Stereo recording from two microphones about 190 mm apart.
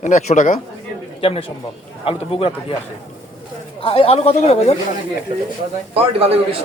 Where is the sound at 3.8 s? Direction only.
30° left (ahead or behind).